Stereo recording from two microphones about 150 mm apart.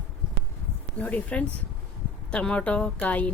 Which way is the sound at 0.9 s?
10° left (ahead or behind).